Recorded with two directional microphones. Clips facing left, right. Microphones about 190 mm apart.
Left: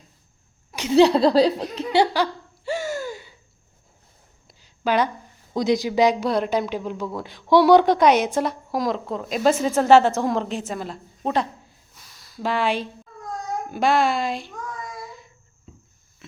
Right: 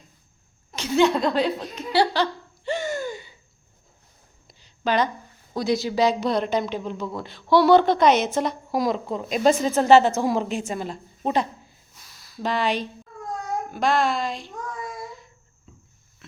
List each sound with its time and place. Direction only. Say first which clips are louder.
0.9 s speech: left 5 dB; 35° left (ahead or behind)
1.9 s a sound: left 1 dB; 15° left (ahead or behind)
4.4 s a sound: left 1 dB; 5° left (ahead or behind)
5.5 s speech: left 3 dB; 20° left (ahead or behind)
10.2 s a woman's voice: even; 5° right (ahead or behind)
12.4 s a woman's voice: left 1 dB; 10° left (ahead or behind)